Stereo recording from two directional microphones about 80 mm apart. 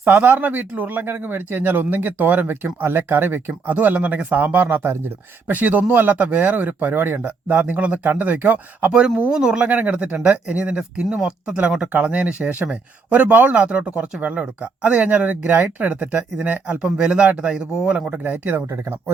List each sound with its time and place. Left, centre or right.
0.0 s speech: right
8.9 s speech: centre
18.3 s speech: right